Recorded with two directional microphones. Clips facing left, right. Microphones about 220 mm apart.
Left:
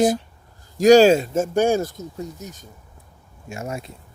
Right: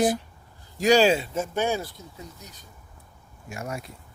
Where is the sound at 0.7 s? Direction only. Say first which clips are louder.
Left 7 dB; 45° left (ahead or behind).